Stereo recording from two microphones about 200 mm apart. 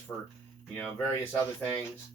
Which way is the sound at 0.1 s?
5° left (ahead or behind).